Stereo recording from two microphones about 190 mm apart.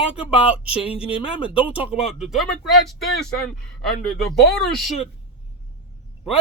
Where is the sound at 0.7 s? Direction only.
30° left (ahead or behind).